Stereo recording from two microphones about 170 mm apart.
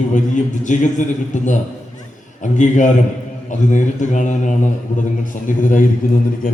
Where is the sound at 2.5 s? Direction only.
45° left (ahead or behind).